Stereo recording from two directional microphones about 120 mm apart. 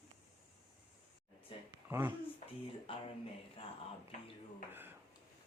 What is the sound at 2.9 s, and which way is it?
Speech, 50° left (ahead or behind).